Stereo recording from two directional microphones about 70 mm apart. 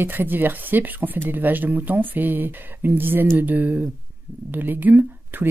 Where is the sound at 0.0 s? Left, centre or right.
Right.